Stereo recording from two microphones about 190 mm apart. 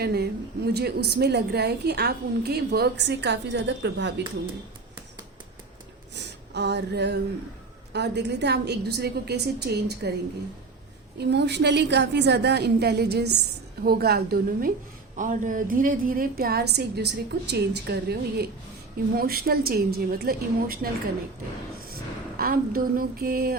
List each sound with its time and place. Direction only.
0.0 s a woman's voice: 60° right (ahead or behind)
6.1 s a sound: 65° right (ahead or behind)
7.9 s a woman's voice: 65° right (ahead or behind)
11.2 s a woman's voice: 60° right (ahead or behind)
22.4 s a woman's voice: 50° right (ahead or behind)